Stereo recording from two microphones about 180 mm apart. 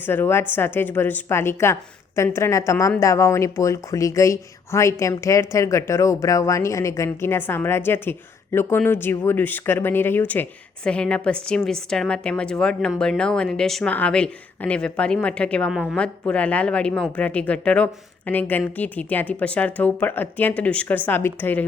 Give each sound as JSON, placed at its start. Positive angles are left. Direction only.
{"t": 0.0, "sound": "a woman's voice", "side_deg": 10}